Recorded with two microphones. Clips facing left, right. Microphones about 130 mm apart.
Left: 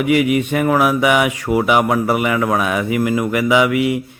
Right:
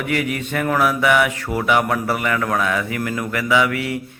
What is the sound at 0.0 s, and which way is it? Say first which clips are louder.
Speech: left 8 dB; 10° left (ahead or behind).